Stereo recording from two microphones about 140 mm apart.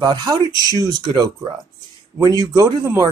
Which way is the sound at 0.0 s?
30° right (ahead or behind).